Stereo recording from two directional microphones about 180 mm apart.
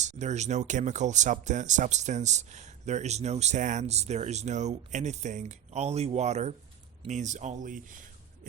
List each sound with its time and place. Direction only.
0.0 s speech: 40° right (ahead or behind)